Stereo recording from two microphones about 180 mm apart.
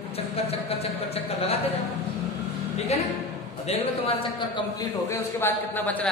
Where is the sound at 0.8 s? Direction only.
35° left (ahead or behind).